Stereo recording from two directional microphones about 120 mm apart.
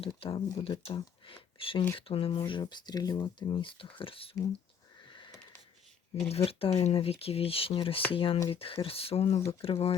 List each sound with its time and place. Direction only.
0.2 s speech: 50° left (ahead or behind)
2.5 s speech: 40° left (ahead or behind)
6.2 s speech: 55° left (ahead or behind)